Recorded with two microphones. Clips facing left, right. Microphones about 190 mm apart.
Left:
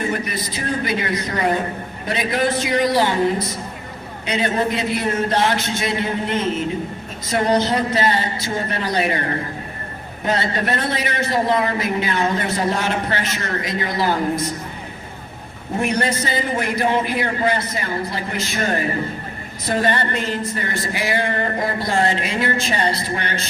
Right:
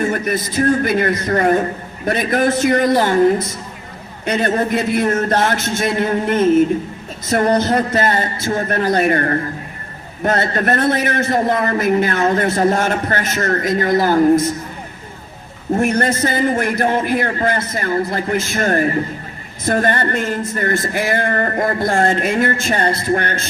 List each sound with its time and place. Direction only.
0.1 s a man's voice: 50° right (ahead or behind)
4.3 s a man's voice: 50° right (ahead or behind)
10.2 s a man's voice: 50° right (ahead or behind)
15.8 s a man's voice: 50° right (ahead or behind)